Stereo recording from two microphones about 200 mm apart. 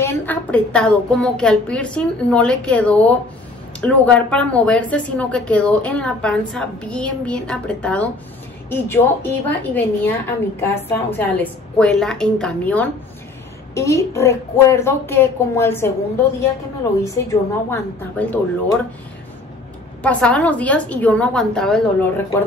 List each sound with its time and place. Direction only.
0.0 s a woman's voice: 10° left (ahead or behind)
17.0 s a woman's voice: 15° left (ahead or behind)
20.0 s a woman's voice: 5° left (ahead or behind)